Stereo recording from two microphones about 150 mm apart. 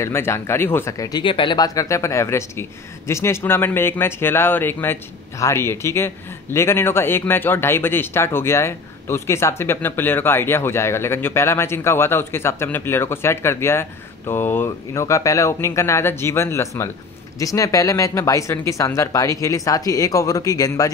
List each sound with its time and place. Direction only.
0.0 s a man's voice: 15° left (ahead or behind)